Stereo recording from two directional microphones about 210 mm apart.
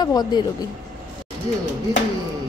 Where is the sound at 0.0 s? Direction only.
20° left (ahead or behind).